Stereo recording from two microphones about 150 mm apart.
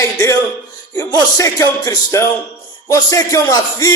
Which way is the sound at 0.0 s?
20° left (ahead or behind).